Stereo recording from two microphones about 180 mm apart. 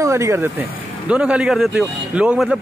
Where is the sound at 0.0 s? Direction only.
15° right (ahead or behind).